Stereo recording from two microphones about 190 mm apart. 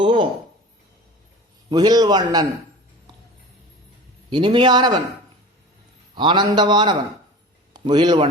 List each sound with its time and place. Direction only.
0.0 s a sound: 25° right (ahead or behind)
1.7 s a man's voice: 20° right (ahead or behind)
4.3 s a man's voice: 25° right (ahead or behind)
6.1 s a man's voice: 25° right (ahead or behind)